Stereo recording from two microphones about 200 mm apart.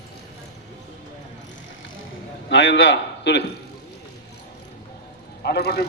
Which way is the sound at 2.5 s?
60° left (ahead or behind).